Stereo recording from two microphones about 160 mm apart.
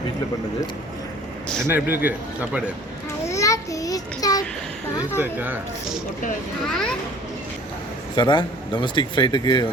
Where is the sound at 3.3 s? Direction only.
20° left (ahead or behind).